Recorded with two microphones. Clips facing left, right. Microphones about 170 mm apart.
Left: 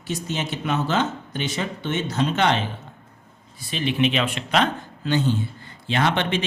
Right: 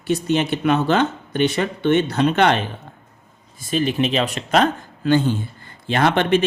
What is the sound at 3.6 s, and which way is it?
Speech, 45° right (ahead or behind).